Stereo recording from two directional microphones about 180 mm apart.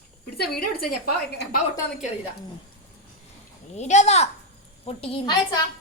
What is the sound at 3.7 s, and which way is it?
A woman's voice, 40° left (ahead or behind).